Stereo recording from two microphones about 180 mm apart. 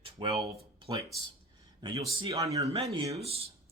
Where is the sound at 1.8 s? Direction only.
25° right (ahead or behind).